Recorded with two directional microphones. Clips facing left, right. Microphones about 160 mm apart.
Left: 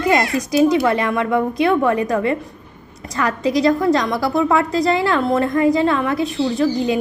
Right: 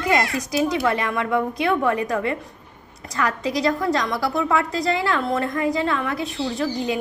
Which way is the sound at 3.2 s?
25° left (ahead or behind).